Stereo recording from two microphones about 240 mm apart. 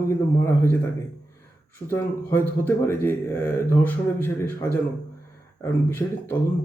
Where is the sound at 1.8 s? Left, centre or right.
Centre.